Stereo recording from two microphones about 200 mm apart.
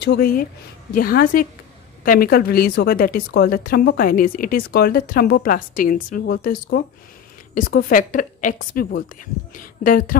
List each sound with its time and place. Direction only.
0.0 s a woman's voice: 50° left (ahead or behind)